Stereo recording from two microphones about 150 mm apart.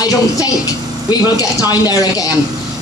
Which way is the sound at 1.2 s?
25° left (ahead or behind).